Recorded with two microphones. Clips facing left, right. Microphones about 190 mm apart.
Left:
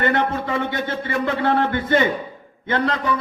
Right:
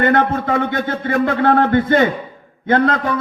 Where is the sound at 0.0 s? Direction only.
45° right (ahead or behind).